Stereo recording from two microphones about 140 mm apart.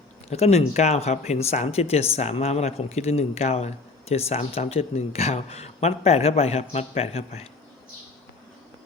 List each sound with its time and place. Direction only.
0.3 s speech: 50° left (ahead or behind)